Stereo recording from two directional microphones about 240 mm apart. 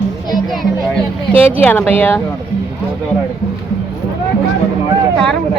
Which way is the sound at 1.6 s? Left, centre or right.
Centre.